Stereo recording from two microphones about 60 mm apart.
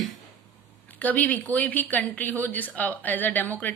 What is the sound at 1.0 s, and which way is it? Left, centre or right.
Speech, left.